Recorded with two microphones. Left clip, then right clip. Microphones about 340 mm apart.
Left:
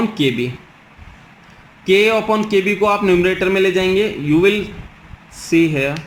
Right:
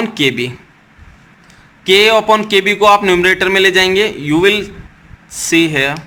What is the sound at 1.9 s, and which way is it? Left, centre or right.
A man's voice, right.